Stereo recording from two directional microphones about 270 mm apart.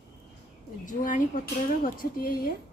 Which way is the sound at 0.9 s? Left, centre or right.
Left.